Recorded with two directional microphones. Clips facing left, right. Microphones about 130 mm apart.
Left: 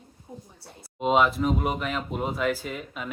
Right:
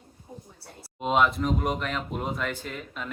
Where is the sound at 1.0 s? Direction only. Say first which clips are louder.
Left 2 dB; centre (ahead or behind).